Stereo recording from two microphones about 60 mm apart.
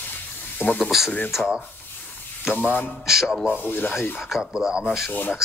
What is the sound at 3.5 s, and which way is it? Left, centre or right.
Speech, left.